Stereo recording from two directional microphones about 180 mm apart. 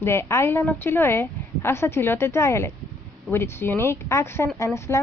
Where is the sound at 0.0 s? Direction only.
15° left (ahead or behind).